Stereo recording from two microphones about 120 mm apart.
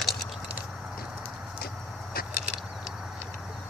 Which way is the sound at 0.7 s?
5° right (ahead or behind).